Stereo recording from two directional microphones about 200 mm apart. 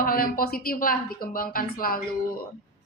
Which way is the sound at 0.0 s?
45° left (ahead or behind).